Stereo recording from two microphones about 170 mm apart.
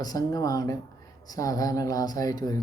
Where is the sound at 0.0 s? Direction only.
20° left (ahead or behind).